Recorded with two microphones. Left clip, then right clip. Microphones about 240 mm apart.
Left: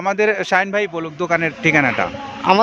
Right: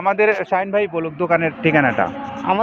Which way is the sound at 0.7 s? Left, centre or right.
Left.